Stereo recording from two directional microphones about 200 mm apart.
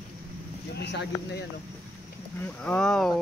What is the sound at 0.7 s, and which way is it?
Speech, 60° left (ahead or behind).